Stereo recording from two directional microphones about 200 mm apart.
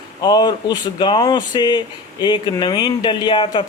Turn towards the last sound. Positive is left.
turn(degrees=25)  # may be behind; listen again after turning